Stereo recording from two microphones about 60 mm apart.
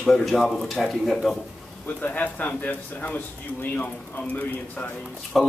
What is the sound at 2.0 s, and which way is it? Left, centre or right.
Speech, left.